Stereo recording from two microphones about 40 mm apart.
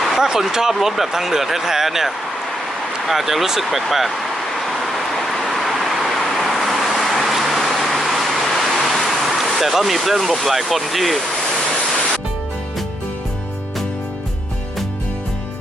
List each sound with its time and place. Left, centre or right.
0.2 s speech: centre
4.5 s vehicle: centre